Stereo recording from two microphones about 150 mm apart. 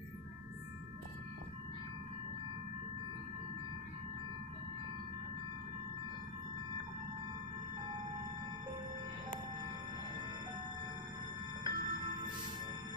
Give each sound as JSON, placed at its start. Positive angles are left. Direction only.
{"t": 11.6, "sound": "music", "side_deg": -30}